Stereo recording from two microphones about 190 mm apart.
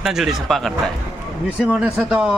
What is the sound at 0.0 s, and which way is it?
Speech, centre (ahead or behind).